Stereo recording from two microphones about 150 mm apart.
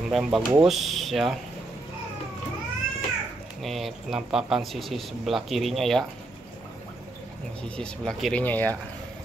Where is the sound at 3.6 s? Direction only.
Centre (ahead or behind).